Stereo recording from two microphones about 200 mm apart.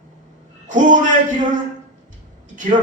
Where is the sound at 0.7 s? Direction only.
40° right (ahead or behind).